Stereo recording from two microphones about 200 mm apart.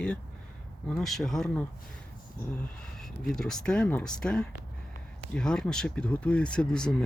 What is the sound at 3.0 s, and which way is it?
Speech, centre (ahead or behind).